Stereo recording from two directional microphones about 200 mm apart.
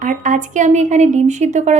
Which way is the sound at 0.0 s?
40° right (ahead or behind).